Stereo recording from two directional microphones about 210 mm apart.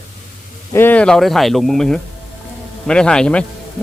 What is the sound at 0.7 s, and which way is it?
Speech, 10° left (ahead or behind).